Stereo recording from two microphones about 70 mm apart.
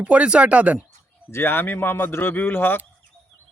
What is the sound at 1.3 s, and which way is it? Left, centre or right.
Speech, left.